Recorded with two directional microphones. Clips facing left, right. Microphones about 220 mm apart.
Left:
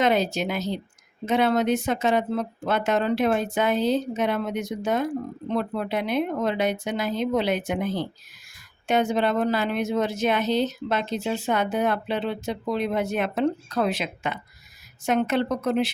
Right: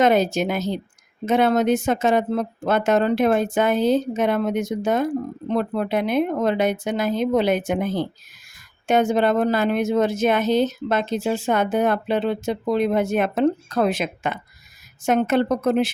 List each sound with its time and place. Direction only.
0.0 s speech: 45° right (ahead or behind)